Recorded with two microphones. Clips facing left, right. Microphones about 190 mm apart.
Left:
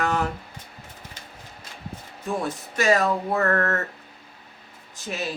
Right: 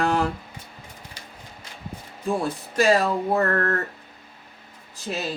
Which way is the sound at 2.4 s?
30° right (ahead or behind).